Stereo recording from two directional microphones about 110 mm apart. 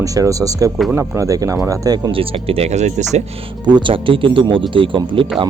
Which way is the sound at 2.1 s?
60° right (ahead or behind).